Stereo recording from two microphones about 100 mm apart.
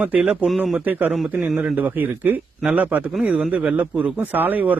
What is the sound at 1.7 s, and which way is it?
A man's voice, 15° right (ahead or behind).